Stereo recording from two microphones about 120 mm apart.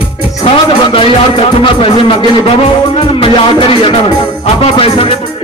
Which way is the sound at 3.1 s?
45° left (ahead or behind).